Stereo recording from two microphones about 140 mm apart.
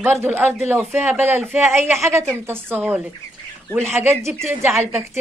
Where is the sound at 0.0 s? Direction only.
15° right (ahead or behind).